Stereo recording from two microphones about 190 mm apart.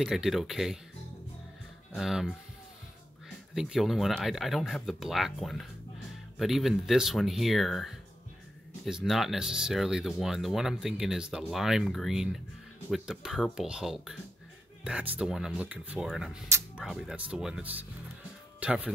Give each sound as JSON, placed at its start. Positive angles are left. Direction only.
{"t": 0.0, "sound": "speech", "side_deg": 0}
{"t": 2.0, "sound": "speech", "side_deg": 0}
{"t": 3.5, "sound": "speech", "side_deg": -5}